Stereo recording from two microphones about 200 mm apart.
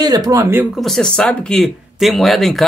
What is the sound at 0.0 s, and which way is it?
Speech, 20° right (ahead or behind).